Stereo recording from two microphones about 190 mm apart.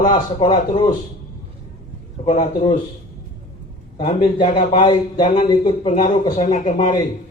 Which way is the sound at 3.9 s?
25° left (ahead or behind).